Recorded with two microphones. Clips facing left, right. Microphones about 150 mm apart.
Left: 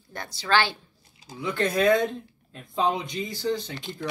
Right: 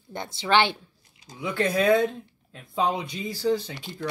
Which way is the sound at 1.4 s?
5° right (ahead or behind).